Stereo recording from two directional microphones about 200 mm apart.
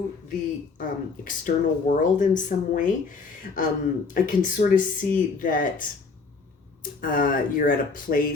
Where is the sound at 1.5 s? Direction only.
50° left (ahead or behind).